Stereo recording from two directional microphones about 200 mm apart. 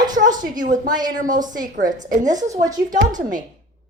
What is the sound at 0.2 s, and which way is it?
A woman's voice, 40° right (ahead or behind).